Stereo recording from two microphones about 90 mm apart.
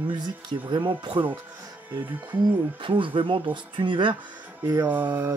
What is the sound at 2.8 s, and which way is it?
Speech, 70° right (ahead or behind).